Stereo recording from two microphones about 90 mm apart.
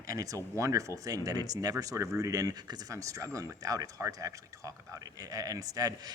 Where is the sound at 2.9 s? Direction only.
35° right (ahead or behind).